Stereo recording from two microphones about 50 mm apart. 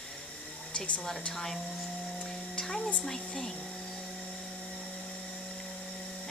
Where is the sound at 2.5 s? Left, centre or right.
Centre.